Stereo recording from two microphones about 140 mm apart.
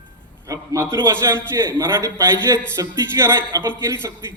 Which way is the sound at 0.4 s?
25° right (ahead or behind).